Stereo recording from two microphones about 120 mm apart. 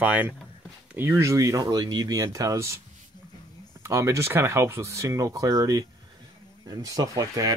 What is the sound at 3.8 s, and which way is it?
Speech, 25° right (ahead or behind).